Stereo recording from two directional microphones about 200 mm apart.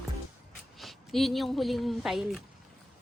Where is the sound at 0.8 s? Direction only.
Centre (ahead or behind).